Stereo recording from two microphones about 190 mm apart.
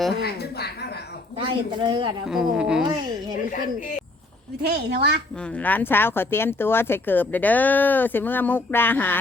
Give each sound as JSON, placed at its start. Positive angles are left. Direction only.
{"t": 0.2, "sound": "a woman's voice", "side_deg": 55}
{"t": 1.5, "sound": "speech", "side_deg": -25}
{"t": 2.3, "sound": "a woman's voice", "side_deg": -5}
{"t": 2.8, "sound": "speech", "side_deg": -25}
{"t": 4.6, "sound": "a woman's voice", "side_deg": -60}
{"t": 5.4, "sound": "speech", "side_deg": 5}